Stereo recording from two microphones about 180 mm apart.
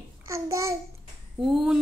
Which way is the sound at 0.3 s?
15° right (ahead or behind).